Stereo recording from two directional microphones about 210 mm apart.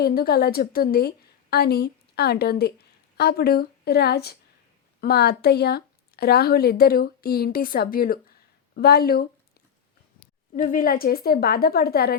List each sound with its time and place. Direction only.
0.0 s speech: 45° left (ahead or behind)
10.5 s speech: 40° left (ahead or behind)